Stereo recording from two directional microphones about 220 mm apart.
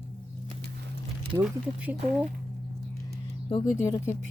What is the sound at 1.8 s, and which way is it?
Speech, 5° right (ahead or behind).